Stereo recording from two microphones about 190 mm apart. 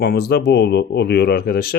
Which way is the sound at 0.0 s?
55° left (ahead or behind).